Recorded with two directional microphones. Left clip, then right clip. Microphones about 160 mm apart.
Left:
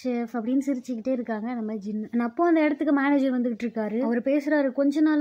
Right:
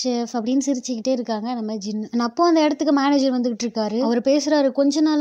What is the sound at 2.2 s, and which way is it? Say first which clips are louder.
A woman's voice: right 5 dB; 20° right (ahead or behind).